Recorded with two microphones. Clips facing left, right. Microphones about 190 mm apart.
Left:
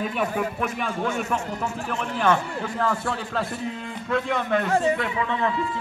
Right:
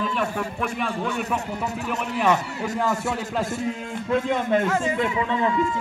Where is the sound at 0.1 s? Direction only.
5° left (ahead or behind).